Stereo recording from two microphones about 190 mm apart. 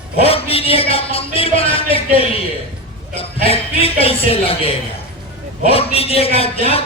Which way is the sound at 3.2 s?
30° left (ahead or behind).